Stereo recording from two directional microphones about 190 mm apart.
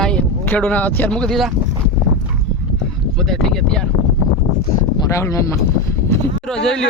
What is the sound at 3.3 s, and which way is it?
Speech, 5° left (ahead or behind).